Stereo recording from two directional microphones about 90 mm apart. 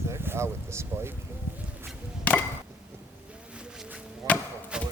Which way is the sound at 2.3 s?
15° left (ahead or behind).